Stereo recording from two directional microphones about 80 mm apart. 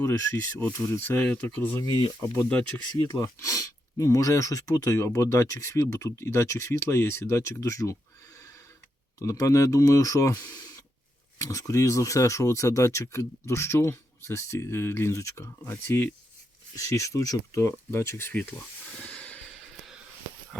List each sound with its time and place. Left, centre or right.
0.0 s speech: left
0.6 s speech: left
1.2 s speech: centre
3.1 s speech: left
9.1 s speech: left
16.7 s speech: left
17.6 s speech: left
19.0 s snort: centre
19.5 s snort: centre